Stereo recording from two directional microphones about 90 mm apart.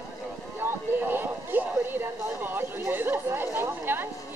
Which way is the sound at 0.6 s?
25° right (ahead or behind).